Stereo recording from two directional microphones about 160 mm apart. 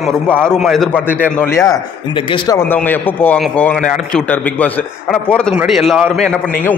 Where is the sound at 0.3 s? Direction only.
5° left (ahead or behind).